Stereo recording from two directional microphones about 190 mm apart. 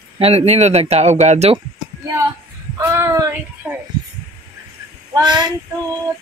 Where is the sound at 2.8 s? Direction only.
15° right (ahead or behind).